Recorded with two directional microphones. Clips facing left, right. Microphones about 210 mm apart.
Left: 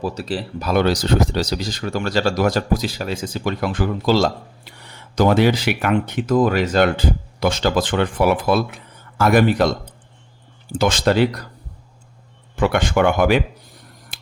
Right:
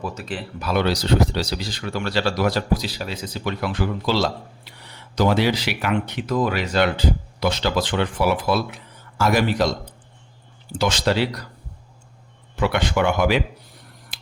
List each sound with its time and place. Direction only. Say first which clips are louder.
0.0 s speech: left 5 dB; 35° left (ahead or behind); by 9.7 s 55° left (ahead or behind)
10.8 s speech: left 4 dB; 50° left (ahead or behind)
12.5 s speech: left 3 dB; 50° left (ahead or behind)